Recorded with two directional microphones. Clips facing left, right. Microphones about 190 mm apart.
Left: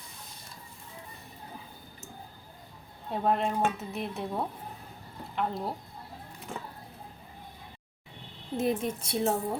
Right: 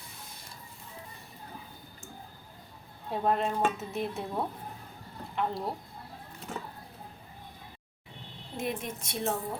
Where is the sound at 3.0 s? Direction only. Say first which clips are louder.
Left 1 dB; centre (ahead or behind).